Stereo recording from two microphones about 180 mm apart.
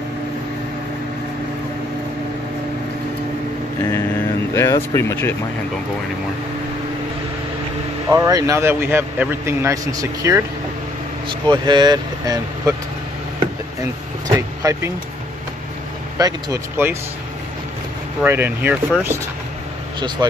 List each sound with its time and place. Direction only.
4.6 s speech: 15° left (ahead or behind)
8.1 s speech: 20° right (ahead or behind)
14.3 s speech: 20° right (ahead or behind)
16.2 s speech: 20° right (ahead or behind)
18.2 s speech: 10° right (ahead or behind)
20.2 s speech: 20° right (ahead or behind)